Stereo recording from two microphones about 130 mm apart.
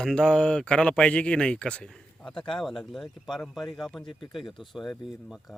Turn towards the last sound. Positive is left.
turn(degrees=0)  # may be behind; listen again after turning